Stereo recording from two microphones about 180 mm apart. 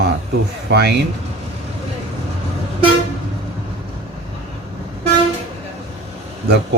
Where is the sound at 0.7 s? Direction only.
65° right (ahead or behind).